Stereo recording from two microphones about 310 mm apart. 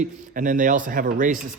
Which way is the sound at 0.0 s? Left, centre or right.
Right.